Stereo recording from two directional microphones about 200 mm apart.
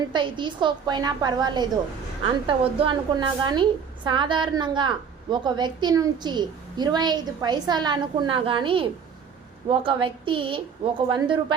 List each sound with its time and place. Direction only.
0.1 s a woman's voice: 25° right (ahead or behind)